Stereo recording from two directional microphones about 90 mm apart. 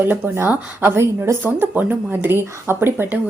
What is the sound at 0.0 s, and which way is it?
Speech, 25° right (ahead or behind).